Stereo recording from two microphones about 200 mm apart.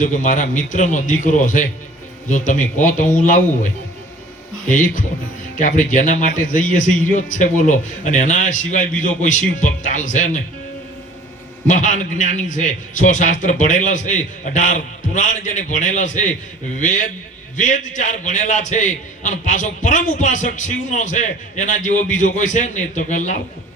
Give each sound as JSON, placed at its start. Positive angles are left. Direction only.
{"t": 0.0, "sound": "a man's voice", "side_deg": 40}
{"t": 5.5, "sound": "a man's voice", "side_deg": 40}
{"t": 11.7, "sound": "a man's voice", "side_deg": 40}